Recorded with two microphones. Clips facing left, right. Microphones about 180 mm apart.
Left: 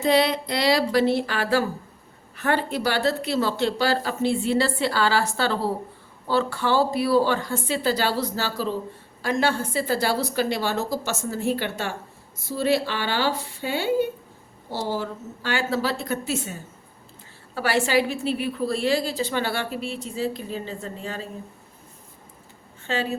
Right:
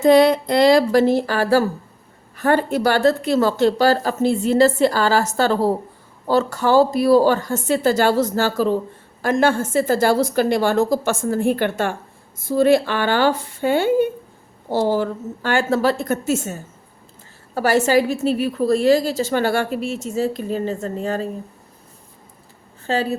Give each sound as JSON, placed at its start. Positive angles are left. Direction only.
{"t": 0.0, "sound": "a woman's voice", "side_deg": -45}
{"t": 22.9, "sound": "a woman's voice", "side_deg": -40}